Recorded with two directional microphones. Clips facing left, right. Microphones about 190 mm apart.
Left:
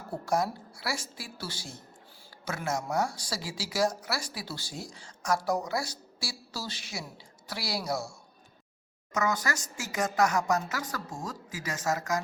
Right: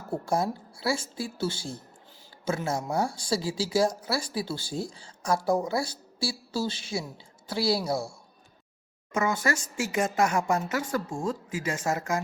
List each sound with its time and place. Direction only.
0.3 s speech: 25° right (ahead or behind)
9.1 s speech: 25° right (ahead or behind)